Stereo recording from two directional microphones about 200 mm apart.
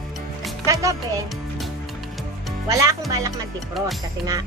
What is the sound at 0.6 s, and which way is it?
Speech, 15° right (ahead or behind).